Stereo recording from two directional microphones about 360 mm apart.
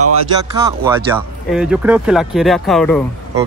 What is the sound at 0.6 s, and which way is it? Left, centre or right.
Speech, centre.